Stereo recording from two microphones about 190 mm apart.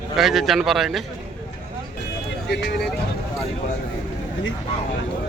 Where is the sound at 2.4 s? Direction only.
60° left (ahead or behind).